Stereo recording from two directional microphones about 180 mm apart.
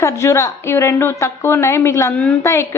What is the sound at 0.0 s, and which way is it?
A woman's voice, 15° left (ahead or behind).